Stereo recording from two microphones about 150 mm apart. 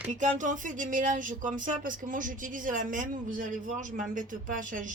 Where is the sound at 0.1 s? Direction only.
55° right (ahead or behind).